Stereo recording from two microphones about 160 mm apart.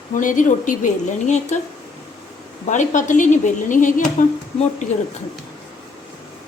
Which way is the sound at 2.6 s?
50° left (ahead or behind).